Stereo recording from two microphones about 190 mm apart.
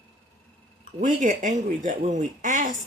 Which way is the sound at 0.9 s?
45° right (ahead or behind).